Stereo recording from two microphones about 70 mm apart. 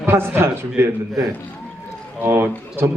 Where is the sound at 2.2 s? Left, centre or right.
Right.